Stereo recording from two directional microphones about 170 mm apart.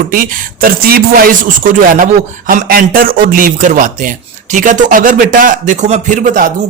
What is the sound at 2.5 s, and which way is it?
A man's voice, 60° right (ahead or behind).